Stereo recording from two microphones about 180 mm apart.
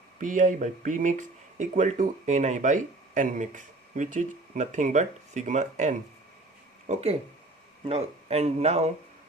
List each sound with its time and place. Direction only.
0.2 s speech: 45° right (ahead or behind)